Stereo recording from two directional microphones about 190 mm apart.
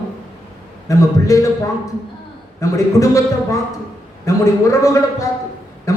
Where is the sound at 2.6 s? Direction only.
15° left (ahead or behind).